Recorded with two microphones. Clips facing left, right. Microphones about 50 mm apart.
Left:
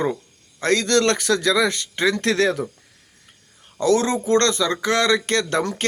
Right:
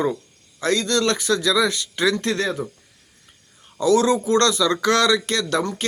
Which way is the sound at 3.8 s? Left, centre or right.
Left.